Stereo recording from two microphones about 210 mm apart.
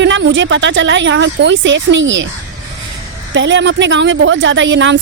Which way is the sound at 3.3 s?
60° right (ahead or behind).